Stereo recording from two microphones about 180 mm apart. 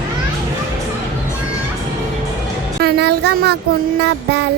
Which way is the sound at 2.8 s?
65° right (ahead or behind).